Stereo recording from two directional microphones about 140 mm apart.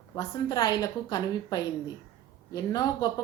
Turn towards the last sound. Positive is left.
turn(degrees=25)  # may be behind; listen again after turning